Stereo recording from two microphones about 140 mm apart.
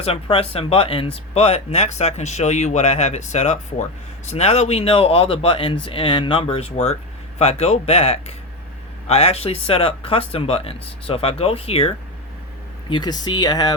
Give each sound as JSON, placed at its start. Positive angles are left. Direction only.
{"t": 0.0, "sound": "speech", "side_deg": 45}
{"t": 12.9, "sound": "speech", "side_deg": 30}